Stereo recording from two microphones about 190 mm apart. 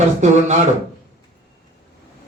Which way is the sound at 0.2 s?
40° right (ahead or behind).